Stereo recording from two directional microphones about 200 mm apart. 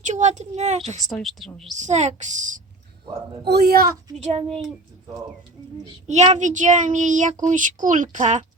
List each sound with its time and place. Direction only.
0.0 s speech: 35° right (ahead or behind)
1.0 s a woman's voice: centre (ahead or behind)
1.7 s a child's voice: 35° right (ahead or behind)
3.4 s speech: 50° right (ahead or behind)
6.1 s a child's voice: 35° right (ahead or behind)